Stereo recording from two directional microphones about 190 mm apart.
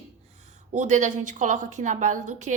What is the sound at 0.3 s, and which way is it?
A woman's voice, 35° right (ahead or behind).